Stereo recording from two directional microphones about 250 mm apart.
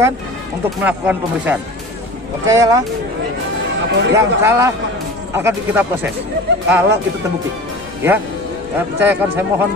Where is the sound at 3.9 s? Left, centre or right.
Right.